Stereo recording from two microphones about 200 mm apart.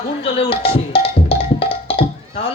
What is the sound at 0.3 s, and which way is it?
Music, 30° left (ahead or behind).